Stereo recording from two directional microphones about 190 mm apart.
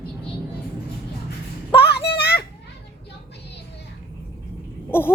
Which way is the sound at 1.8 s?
60° left (ahead or behind).